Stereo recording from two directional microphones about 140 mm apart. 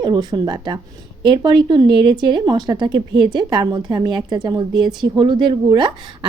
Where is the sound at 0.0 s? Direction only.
30° right (ahead or behind).